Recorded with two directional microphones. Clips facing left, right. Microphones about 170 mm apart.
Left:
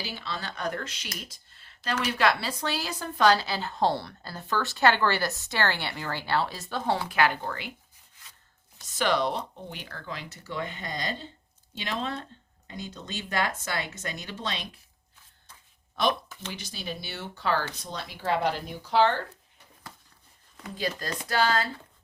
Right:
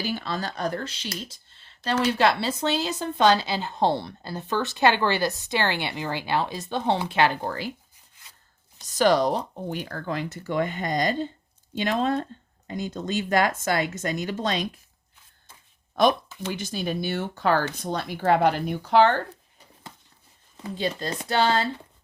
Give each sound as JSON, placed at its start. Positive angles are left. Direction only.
{"t": 0.0, "sound": "speech", "side_deg": -50}
{"t": 9.0, "sound": "speech", "side_deg": -40}
{"t": 16.5, "sound": "speech", "side_deg": -50}
{"t": 20.6, "sound": "speech", "side_deg": -25}